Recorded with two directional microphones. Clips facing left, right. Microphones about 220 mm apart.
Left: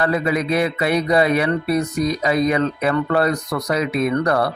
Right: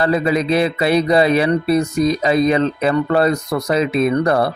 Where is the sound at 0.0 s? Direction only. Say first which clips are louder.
Right 3 dB; 30° right (ahead or behind).